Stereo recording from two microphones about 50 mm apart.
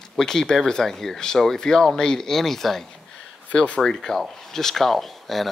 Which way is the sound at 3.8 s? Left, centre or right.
Centre.